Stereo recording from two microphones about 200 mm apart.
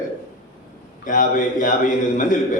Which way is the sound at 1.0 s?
40° left (ahead or behind).